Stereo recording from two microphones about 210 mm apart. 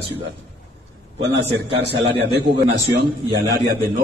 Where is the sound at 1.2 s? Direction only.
55° right (ahead or behind).